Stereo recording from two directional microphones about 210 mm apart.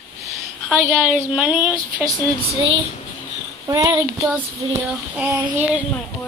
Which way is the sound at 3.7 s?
15° right (ahead or behind).